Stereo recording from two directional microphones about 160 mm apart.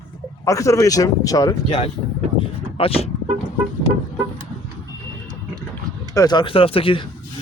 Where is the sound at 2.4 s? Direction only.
35° left (ahead or behind).